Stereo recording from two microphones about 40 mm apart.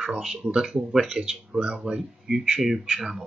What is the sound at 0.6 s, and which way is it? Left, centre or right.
Speech, centre.